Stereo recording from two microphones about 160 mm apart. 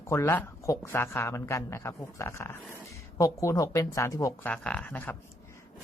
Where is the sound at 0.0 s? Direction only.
15° left (ahead or behind).